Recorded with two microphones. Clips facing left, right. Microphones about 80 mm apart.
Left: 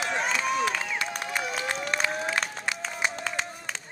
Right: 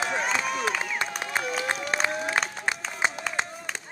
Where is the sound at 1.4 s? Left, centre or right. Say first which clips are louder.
Right 2 dB; centre.